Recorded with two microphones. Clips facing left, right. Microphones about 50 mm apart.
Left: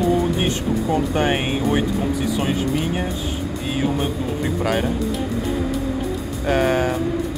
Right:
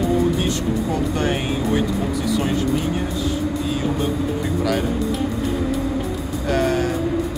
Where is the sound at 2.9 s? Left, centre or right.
Left.